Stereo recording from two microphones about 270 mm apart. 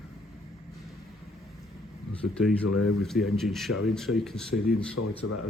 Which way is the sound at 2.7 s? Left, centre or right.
Left.